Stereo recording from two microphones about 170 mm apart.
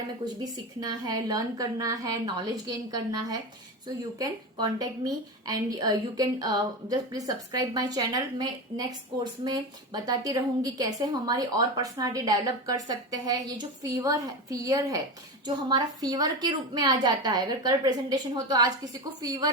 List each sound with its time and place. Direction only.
0.4 s a woman's voice: 20° right (ahead or behind)